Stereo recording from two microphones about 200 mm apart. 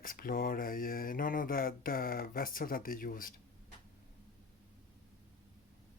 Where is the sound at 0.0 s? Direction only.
45° left (ahead or behind).